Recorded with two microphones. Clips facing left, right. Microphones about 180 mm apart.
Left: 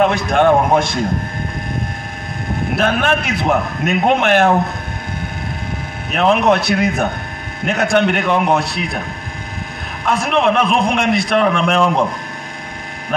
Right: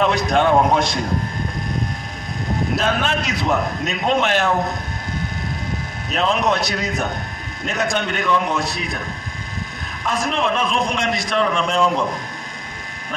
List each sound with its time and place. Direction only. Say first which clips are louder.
0.0 s a man's voice: left 4 dB; 55° left (ahead or behind)
2.7 s a man's voice: left 6 dB; 60° left (ahead or behind)
6.1 s a man's voice: left 6 dB; 60° left (ahead or behind)
10.0 s a man's voice: left 6 dB; 60° left (ahead or behind)